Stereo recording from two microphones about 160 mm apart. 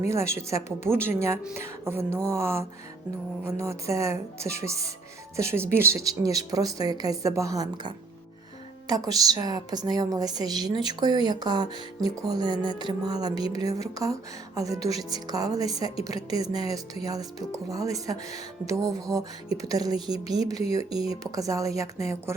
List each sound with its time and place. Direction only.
0.1 s a woman's voice: 20° right (ahead or behind)